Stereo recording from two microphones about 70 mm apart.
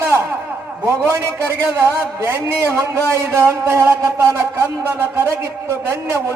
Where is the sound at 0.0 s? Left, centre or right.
Right.